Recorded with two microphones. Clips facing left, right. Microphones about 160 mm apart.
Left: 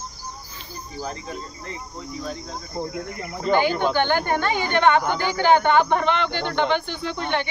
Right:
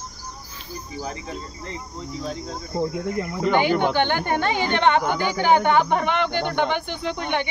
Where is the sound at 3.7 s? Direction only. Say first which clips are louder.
Right 2 dB; 70° right (ahead or behind).